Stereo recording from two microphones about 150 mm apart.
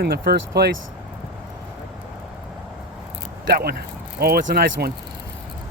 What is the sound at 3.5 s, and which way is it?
Speech, 90° right.